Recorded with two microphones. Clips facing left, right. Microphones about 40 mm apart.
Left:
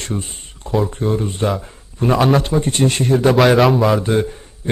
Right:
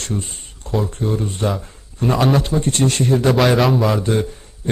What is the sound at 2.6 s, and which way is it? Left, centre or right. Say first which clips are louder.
Speech: left 1 dB; left.